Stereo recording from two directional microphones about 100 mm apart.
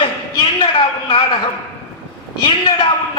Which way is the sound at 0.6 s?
50° left (ahead or behind).